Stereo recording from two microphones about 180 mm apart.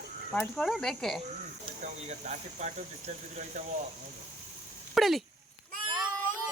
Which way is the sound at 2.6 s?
40° right (ahead or behind).